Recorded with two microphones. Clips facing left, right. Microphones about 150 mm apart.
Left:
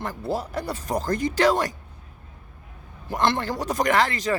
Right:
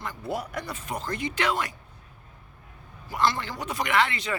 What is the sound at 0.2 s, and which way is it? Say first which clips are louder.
Speech: left 3 dB; 30° left (ahead or behind).